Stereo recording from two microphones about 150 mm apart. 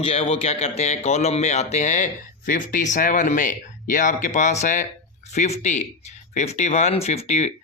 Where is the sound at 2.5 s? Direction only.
65° left (ahead or behind); by 7.5 s 50° left (ahead or behind).